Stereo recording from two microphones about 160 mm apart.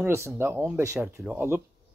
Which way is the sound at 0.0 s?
15° right (ahead or behind).